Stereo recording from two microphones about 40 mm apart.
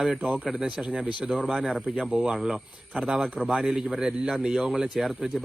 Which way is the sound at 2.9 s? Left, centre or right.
Right.